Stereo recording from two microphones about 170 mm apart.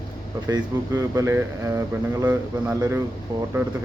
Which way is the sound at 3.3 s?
25° right (ahead or behind).